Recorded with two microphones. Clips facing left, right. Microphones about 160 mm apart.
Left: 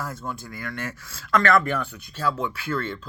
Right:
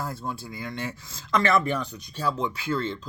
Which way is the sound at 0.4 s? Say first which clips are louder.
Even; 20° right (ahead or behind).